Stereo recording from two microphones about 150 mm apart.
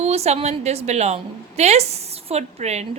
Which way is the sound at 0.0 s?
45° right (ahead or behind).